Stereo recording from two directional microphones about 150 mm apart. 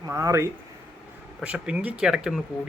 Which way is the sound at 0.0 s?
20° right (ahead or behind).